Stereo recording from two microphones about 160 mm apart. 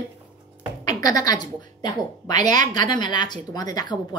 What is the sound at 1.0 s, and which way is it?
A woman's voice, 25° left (ahead or behind).